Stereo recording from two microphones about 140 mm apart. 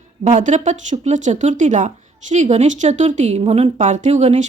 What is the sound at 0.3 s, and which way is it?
A woman's voice, 60° right (ahead or behind).